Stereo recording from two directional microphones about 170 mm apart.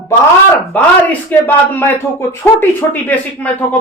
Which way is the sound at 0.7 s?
10° left (ahead or behind).